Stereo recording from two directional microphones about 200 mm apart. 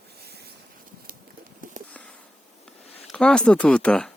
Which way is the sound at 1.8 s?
40° right (ahead or behind).